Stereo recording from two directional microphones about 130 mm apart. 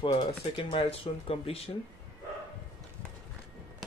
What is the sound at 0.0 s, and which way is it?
Speech, 40° left (ahead or behind).